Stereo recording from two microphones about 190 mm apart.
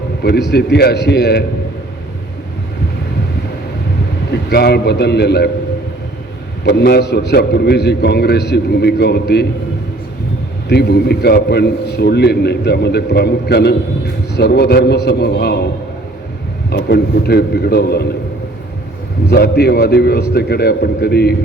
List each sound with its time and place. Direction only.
0.2 s a man's voice: 60° left (ahead or behind)
4.3 s a man's voice: 60° left (ahead or behind)
6.7 s a man's voice: 60° left (ahead or behind)
10.7 s a man's voice: 60° left (ahead or behind)
19.3 s a man's voice: 55° left (ahead or behind)